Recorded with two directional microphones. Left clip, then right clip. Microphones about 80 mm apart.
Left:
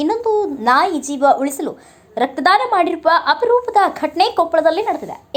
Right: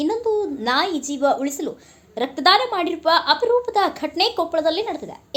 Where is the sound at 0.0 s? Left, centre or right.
Left.